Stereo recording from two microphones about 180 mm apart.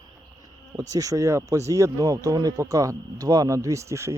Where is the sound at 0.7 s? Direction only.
20° right (ahead or behind).